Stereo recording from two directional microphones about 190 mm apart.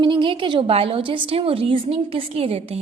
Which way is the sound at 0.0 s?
25° right (ahead or behind).